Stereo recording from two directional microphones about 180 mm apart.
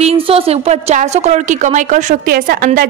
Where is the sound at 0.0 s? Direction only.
35° right (ahead or behind).